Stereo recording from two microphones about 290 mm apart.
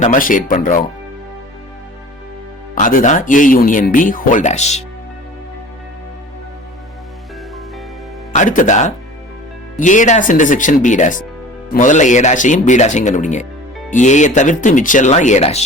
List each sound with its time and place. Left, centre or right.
0.0 s speech: left
2.7 s speech: left
8.4 s speech: left